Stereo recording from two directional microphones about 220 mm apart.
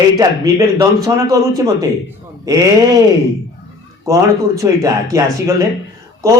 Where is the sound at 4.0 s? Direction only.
15° right (ahead or behind).